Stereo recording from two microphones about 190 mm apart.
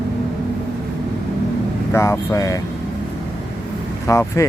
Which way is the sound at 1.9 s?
15° left (ahead or behind).